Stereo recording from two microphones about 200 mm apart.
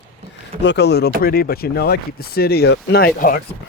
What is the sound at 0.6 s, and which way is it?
Speech, 60° left (ahead or behind).